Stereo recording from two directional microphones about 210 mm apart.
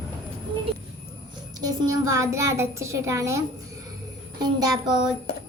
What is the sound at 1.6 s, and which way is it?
A woman's voice, 15° right (ahead or behind).